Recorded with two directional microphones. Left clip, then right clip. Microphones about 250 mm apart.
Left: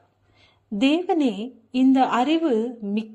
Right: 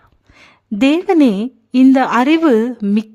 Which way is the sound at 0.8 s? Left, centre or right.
Right.